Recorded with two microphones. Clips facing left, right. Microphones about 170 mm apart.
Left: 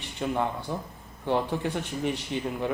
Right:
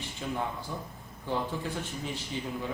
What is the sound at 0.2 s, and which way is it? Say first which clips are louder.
A man's voice: left 6 dB; 60° left (ahead or behind).